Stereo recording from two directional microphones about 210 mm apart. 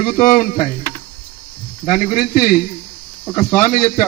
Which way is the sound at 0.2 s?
35° left (ahead or behind).